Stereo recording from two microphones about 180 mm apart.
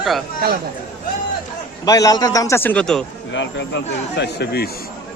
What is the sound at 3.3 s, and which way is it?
Speech, 90° left.